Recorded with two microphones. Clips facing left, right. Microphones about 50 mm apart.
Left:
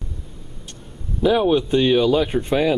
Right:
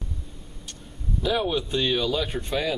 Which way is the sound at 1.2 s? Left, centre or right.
Centre.